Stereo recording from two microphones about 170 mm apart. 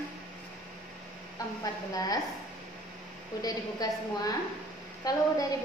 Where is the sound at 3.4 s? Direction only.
20° left (ahead or behind).